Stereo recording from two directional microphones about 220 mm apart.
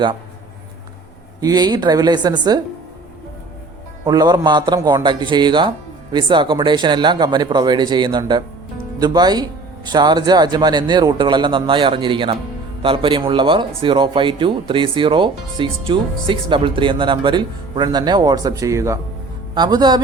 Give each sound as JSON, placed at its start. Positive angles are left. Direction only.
{"t": 1.4, "sound": "speech", "side_deg": -15}
{"t": 4.0, "sound": "speech", "side_deg": -20}